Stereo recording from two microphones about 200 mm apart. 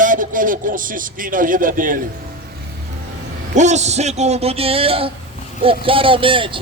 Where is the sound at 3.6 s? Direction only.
35° right (ahead or behind).